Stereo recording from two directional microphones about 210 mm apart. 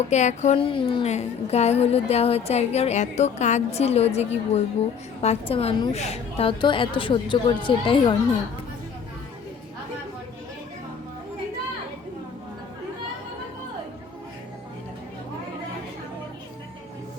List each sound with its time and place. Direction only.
0.1 s a woman's voice: 35° left (ahead or behind)